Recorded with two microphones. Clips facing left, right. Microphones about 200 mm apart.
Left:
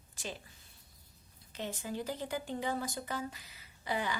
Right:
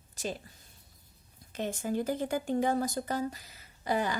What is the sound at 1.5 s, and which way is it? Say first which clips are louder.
Speech: right 7 dB; 50° right (ahead or behind).